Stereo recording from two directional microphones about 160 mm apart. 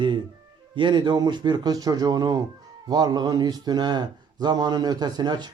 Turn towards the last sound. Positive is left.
turn(degrees=-25)  # may be behind; listen again after turning